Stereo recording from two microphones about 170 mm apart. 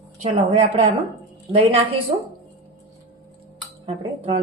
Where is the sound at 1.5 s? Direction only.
35° right (ahead or behind).